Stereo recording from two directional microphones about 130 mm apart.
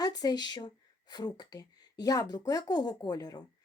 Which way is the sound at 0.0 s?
30° left (ahead or behind).